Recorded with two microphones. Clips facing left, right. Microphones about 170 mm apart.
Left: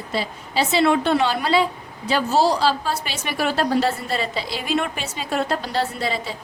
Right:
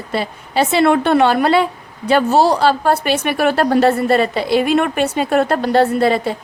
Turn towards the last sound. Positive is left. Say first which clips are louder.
# right 11 dB
turn(degrees=-60)  # may be behind; listen again after turning